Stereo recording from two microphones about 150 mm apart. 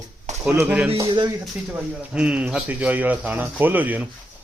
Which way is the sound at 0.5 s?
10° right (ahead or behind).